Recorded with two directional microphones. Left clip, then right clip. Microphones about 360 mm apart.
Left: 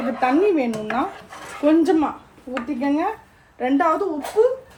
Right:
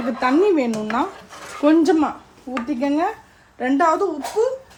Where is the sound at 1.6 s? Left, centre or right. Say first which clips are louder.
Right 1 dB; right.